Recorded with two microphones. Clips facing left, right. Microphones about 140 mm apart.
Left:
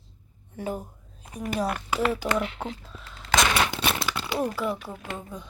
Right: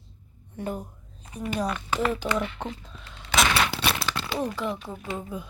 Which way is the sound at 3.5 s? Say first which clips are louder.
Even; 20° left (ahead or behind).